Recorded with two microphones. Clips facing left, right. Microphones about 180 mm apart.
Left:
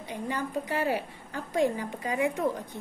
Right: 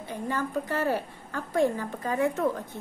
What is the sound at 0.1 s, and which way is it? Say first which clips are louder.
A woman's voice: right 2 dB; 15° left (ahead or behind).